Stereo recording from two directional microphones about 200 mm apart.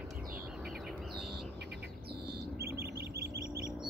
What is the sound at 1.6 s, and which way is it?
Bird, 55° right (ahead or behind).